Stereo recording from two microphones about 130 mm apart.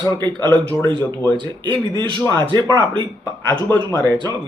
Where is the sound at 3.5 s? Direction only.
20° left (ahead or behind).